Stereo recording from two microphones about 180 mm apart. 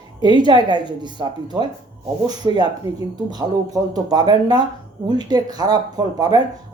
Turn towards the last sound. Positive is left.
turn(degrees=-20)  # may be behind; listen again after turning